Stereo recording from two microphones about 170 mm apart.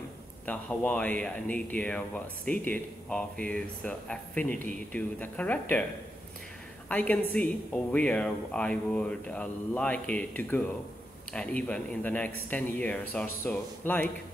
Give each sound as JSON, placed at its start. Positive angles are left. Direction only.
{"t": 0.5, "sound": "speech", "side_deg": 5}
{"t": 6.9, "sound": "speech", "side_deg": 5}